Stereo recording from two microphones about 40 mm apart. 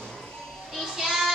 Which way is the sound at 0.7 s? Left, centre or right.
Centre.